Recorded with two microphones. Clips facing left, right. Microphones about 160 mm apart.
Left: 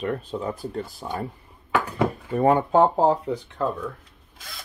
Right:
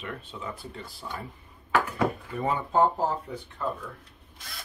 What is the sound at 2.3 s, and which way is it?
Speech, 60° left (ahead or behind).